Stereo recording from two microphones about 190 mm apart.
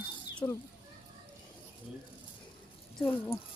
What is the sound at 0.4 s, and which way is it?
Speech, 15° left (ahead or behind).